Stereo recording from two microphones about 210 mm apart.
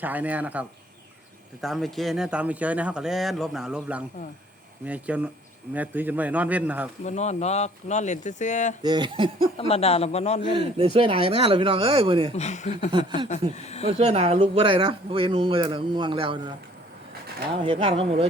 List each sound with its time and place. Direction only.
0.0 s a man's voice: 10° right (ahead or behind)
1.6 s a man's voice: centre (ahead or behind)
7.0 s speech: 35° left (ahead or behind)
8.8 s speech: 20° right (ahead or behind)
9.6 s a man's voice: 30° left (ahead or behind)
10.5 s speech: 25° right (ahead or behind)
12.4 s speech: 35° left (ahead or behind)
12.9 s speech: 20° right (ahead or behind)
13.6 s speech: 30° left (ahead or behind)
13.8 s speech: 30° right (ahead or behind)
17.6 s speech: 25° right (ahead or behind)